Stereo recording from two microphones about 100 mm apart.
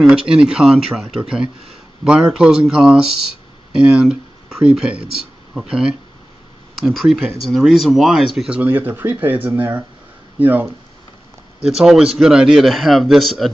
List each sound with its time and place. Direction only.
0.1 s speech: 5° right (ahead or behind)
3.8 s a sound: 10° right (ahead or behind)
5.5 s speech: 5° right (ahead or behind)
8.5 s speech: 15° right (ahead or behind)
11.6 s speech: 5° right (ahead or behind)